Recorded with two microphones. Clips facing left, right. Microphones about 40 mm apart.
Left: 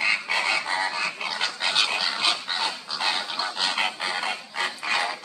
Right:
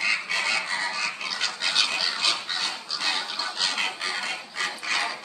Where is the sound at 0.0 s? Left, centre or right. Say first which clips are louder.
Left 2 dB; centre.